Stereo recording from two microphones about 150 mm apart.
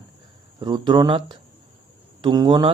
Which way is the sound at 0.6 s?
35° right (ahead or behind).